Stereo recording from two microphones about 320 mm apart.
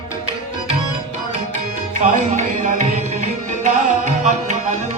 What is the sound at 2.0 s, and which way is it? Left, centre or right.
Tabla, right.